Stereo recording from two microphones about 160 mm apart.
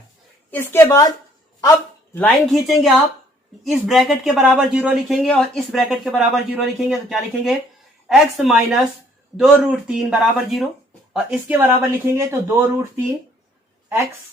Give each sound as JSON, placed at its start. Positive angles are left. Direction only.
{"t": 0.5, "sound": "a woman's voice", "side_deg": 15}
{"t": 2.1, "sound": "a woman's voice", "side_deg": 5}
{"t": 11.5, "sound": "speech", "side_deg": -15}